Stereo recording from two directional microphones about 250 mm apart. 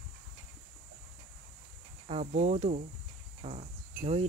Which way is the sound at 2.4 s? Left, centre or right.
Right.